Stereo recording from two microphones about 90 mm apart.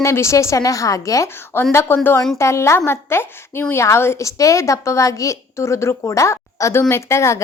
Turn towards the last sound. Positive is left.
turn(degrees=30)  # may be behind; listen again after turning